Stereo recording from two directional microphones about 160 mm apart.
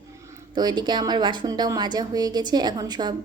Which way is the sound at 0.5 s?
25° right (ahead or behind).